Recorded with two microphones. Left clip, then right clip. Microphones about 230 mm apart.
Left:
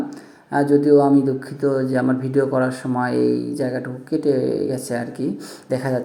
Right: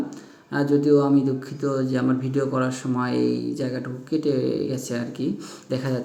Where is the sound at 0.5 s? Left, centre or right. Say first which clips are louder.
Left 5 dB; centre.